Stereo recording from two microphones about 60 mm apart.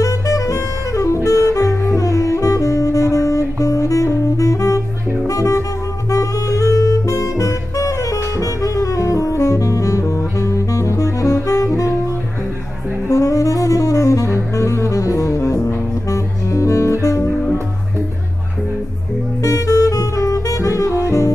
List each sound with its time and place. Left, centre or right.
0.0 s saxophone: left
5.2 s music: left
13.1 s saxophone: left
19.4 s saxophone: left